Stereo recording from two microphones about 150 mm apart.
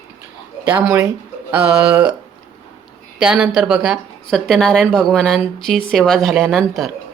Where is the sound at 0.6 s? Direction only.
15° right (ahead or behind).